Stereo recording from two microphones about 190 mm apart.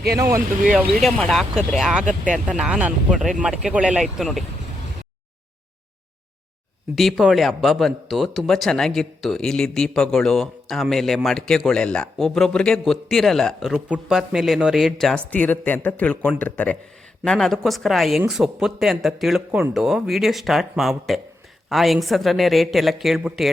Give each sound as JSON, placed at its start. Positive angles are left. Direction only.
{"t": 0.2, "sound": "speech", "side_deg": -15}
{"t": 0.9, "sound": "speech", "side_deg": 0}
{"t": 2.0, "sound": "speech", "side_deg": -40}
{"t": 2.5, "sound": "speech", "side_deg": -5}
{"t": 6.9, "sound": "speech", "side_deg": 0}